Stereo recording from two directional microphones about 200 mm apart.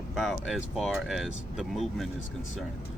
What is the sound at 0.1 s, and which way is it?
Speech, centre (ahead or behind).